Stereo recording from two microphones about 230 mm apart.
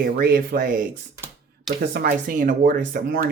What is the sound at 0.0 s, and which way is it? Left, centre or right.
Speech, right.